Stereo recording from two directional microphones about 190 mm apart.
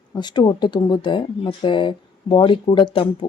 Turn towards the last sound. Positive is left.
turn(degrees=30)  # may be behind; listen again after turning